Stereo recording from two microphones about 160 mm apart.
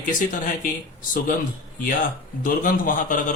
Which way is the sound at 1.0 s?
60° left (ahead or behind).